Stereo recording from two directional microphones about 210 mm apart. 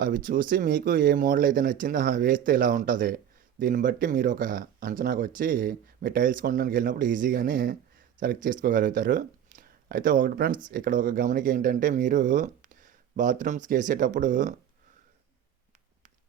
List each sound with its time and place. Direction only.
0.0 s speech: 40° right (ahead or behind)